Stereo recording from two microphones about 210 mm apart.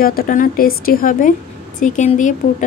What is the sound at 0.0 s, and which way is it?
A woman's voice, 40° left (ahead or behind).